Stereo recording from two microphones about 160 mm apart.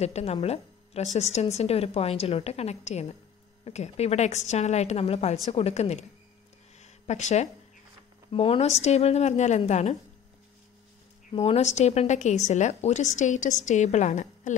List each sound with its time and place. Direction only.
0.0 s a woman's voice: 40° left (ahead or behind)
6.8 s a sound: 45° left (ahead or behind)
8.3 s a woman's voice: 35° left (ahead or behind)
11.3 s a woman's voice: 40° left (ahead or behind)